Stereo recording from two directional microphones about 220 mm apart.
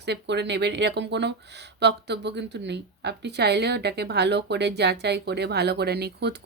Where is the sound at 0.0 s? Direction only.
50° right (ahead or behind).